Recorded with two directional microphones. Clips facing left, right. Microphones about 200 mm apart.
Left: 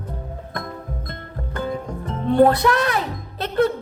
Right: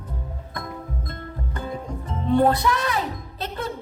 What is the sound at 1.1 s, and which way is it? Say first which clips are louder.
Music: left 1 dB; 75° left (ahead or behind).